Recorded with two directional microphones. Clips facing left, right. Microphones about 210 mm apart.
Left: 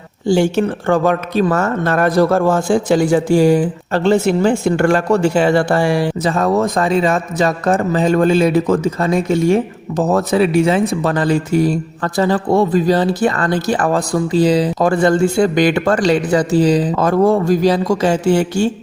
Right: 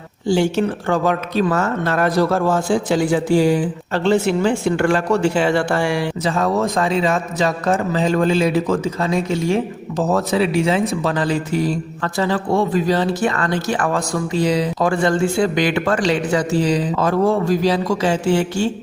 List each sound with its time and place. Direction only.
0.3 s speech: 50° left (ahead or behind)